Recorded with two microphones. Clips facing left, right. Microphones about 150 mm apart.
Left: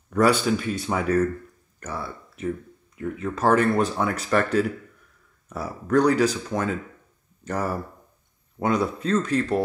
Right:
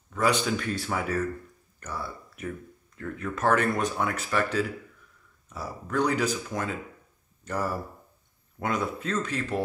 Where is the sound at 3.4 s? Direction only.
35° left (ahead or behind).